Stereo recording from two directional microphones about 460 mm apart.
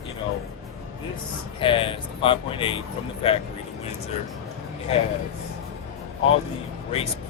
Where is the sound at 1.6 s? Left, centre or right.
Centre.